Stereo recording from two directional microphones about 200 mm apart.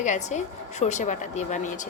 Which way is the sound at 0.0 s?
35° left (ahead or behind).